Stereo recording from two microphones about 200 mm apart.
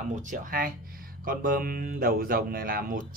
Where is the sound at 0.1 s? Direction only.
40° right (ahead or behind).